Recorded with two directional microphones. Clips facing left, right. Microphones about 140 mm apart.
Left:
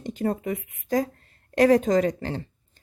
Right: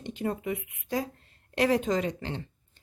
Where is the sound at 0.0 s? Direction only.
40° left (ahead or behind).